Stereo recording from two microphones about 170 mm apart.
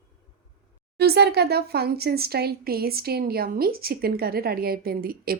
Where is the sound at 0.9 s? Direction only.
75° right (ahead or behind).